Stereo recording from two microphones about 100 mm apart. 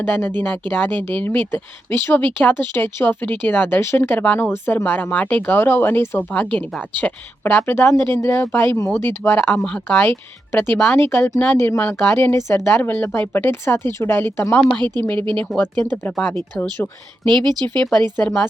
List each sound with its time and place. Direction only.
0.0 s speech: 20° left (ahead or behind)
17.2 s speech: 50° right (ahead or behind)
18.2 s a woman's voice: 5° left (ahead or behind)